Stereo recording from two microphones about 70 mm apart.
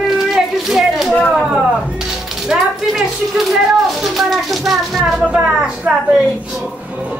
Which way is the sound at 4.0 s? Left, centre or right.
Centre.